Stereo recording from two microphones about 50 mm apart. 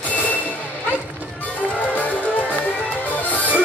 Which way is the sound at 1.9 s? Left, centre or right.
Left.